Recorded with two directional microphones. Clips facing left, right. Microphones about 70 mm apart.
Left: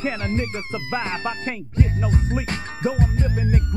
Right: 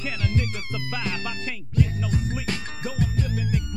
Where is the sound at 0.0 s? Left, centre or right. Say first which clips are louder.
Left 4 dB; left.